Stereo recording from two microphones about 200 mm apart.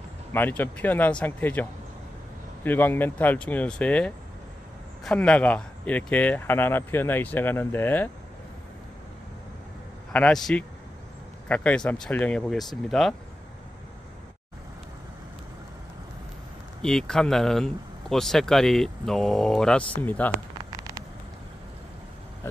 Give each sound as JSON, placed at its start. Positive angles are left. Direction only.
{"t": 0.3, "sound": "speech", "side_deg": 10}
{"t": 10.1, "sound": "speech", "side_deg": 5}
{"t": 16.8, "sound": "speech", "side_deg": 5}
{"t": 20.7, "sound": "vehicle", "side_deg": -15}